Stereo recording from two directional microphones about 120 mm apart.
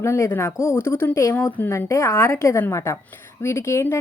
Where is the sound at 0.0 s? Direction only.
20° left (ahead or behind).